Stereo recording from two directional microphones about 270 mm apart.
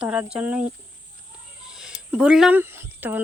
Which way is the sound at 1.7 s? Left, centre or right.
Centre.